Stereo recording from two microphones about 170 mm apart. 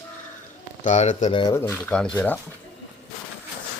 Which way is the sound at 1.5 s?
10° left (ahead or behind).